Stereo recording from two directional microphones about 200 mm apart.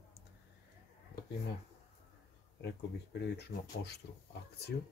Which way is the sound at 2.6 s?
55° left (ahead or behind).